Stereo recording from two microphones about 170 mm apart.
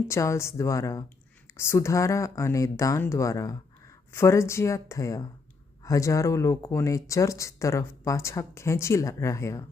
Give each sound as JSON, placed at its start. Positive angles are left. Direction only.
{"t": 0.1, "sound": "speech", "side_deg": 15}